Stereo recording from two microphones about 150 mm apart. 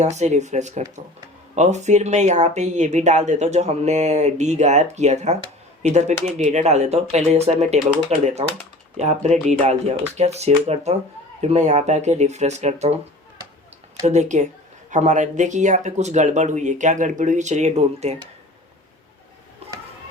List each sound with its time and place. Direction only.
0.0 s speech: 50° right (ahead or behind)
14.0 s speech: 50° right (ahead or behind)